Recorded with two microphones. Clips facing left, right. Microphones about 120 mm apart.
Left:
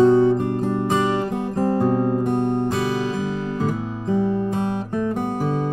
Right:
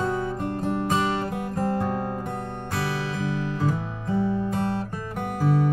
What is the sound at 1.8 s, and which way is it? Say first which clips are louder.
Music: left 8 dB; 40° left (ahead or behind).